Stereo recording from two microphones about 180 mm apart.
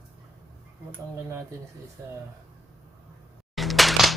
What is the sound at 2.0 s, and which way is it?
Speech, 15° right (ahead or behind).